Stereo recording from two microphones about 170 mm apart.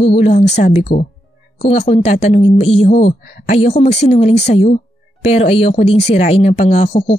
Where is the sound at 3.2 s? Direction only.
60° left (ahead or behind).